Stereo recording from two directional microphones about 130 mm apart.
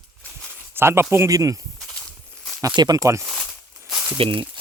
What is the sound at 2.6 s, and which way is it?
Speech, 30° right (ahead or behind).